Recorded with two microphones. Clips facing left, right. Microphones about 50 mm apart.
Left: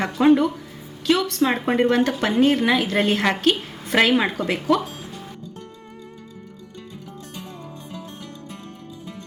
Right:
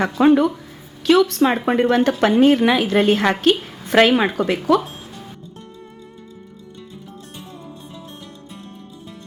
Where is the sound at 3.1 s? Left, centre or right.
Centre.